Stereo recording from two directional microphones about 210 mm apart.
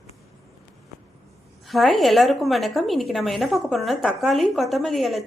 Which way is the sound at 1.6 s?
Centre (ahead or behind).